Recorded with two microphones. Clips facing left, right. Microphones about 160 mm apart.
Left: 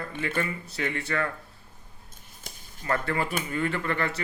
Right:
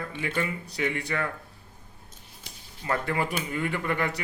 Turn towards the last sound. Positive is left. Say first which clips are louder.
# even
turn(degrees=-15)  # may be behind; listen again after turning